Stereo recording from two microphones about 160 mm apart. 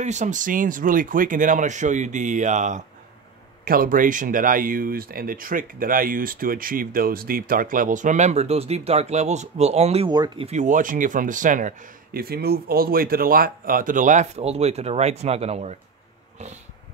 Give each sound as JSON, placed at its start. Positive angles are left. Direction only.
{"t": 0.0, "sound": "speech", "side_deg": -50}
{"t": 3.6, "sound": "speech", "side_deg": -65}
{"t": 10.0, "sound": "speech", "side_deg": -25}
{"t": 10.4, "sound": "speech", "side_deg": -50}